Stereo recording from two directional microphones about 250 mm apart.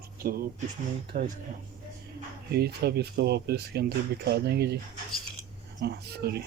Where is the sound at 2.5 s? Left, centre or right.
Right.